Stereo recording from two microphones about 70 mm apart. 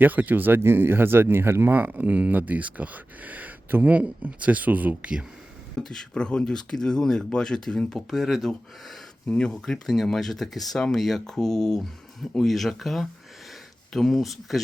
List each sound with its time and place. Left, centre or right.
0.0 s speech: right
5.7 s speech: centre